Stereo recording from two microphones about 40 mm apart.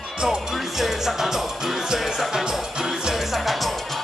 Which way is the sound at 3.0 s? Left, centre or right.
Centre.